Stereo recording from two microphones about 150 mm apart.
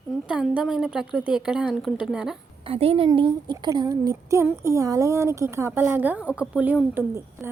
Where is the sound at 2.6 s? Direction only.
40° right (ahead or behind).